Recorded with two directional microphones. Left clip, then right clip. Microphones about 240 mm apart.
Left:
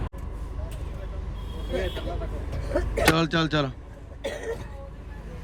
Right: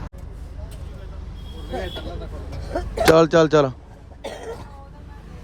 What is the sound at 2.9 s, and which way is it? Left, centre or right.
Speech, right.